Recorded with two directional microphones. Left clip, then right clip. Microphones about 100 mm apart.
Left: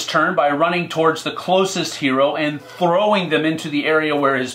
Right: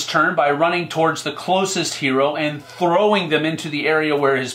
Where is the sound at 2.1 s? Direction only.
40° left (ahead or behind).